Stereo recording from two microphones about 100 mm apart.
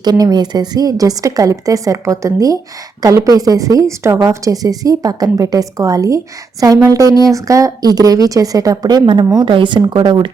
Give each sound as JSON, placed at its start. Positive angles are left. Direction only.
{"t": 0.0, "sound": "a woman's voice", "side_deg": -40}